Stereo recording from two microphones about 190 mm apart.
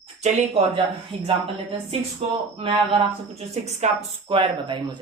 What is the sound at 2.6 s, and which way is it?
Speech, 30° right (ahead or behind).